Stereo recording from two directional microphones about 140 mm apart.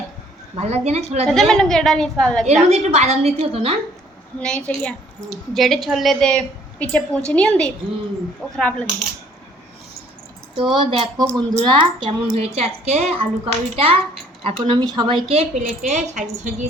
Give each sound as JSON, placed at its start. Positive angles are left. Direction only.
{"t": 0.5, "sound": "a woman's voice", "side_deg": -50}
{"t": 1.3, "sound": "a woman's voice", "side_deg": 5}
{"t": 2.6, "sound": "a woman's voice", "side_deg": -50}
{"t": 4.4, "sound": "a woman's voice", "side_deg": 5}
{"t": 10.8, "sound": "a woman's voice", "side_deg": -35}